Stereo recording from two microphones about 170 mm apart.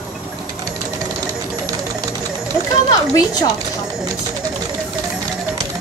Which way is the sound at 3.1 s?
20° left (ahead or behind).